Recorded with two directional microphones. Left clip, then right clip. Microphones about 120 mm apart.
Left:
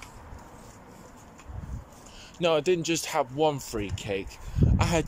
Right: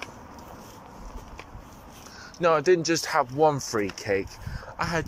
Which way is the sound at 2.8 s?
55° left (ahead or behind).